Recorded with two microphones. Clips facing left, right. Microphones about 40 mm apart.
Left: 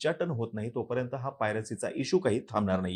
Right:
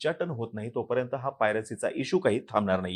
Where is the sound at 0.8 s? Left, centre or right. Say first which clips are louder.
Right 4 dB; right.